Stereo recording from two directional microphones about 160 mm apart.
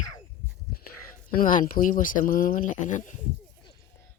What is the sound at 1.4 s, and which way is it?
Speech, 60° left (ahead or behind).